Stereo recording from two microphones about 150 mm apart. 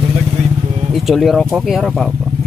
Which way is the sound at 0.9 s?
Centre (ahead or behind).